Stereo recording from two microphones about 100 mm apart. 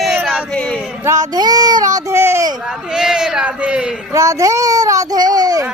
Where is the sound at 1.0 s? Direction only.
35° right (ahead or behind).